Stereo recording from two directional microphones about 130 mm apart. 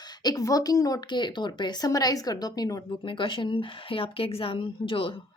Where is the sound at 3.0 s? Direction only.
40° left (ahead or behind).